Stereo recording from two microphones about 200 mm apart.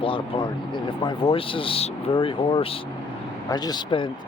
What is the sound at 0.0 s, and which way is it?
Speech, 25° left (ahead or behind).